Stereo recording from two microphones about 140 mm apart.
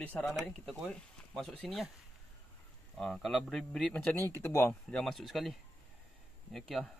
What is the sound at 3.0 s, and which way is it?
A man's voice, centre (ahead or behind).